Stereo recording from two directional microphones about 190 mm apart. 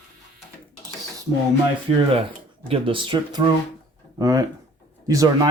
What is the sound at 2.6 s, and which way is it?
Speech, 30° right (ahead or behind).